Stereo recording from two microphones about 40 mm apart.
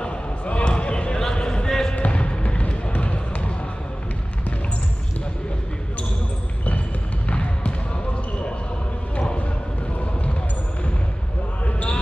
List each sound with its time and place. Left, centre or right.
0.0 s basketball bounce: left
1.2 s a sound: left
2.0 s music: left
7.2 s basketball bounce: left
11.6 s basketball bounce: left